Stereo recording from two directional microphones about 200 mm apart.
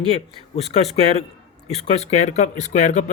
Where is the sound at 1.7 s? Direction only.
30° left (ahead or behind).